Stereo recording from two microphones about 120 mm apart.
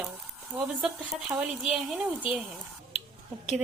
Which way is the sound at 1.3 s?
5° right (ahead or behind).